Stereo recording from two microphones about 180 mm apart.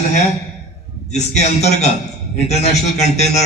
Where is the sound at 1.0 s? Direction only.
40° left (ahead or behind).